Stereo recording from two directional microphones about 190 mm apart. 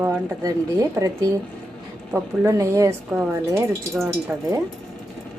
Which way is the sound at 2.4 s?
15° right (ahead or behind).